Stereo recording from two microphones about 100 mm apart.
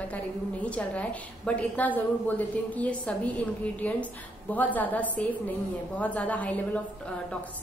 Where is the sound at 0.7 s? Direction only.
10° left (ahead or behind).